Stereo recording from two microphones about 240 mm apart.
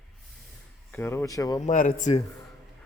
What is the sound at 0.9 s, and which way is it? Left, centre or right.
Speech, centre.